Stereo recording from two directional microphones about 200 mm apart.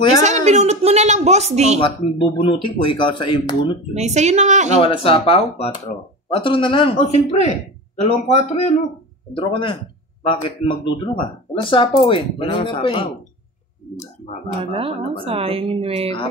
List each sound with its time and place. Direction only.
0.2 s a sound: 35° right (ahead or behind)
1.8 s speech: 25° left (ahead or behind)
3.9 s a woman's voice: 35° right (ahead or behind)
4.8 s a man's voice: 30° left (ahead or behind)
14.7 s a woman's voice: 30° right (ahead or behind)